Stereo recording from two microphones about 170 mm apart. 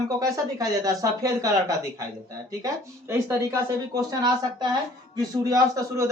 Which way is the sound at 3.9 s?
25° right (ahead or behind).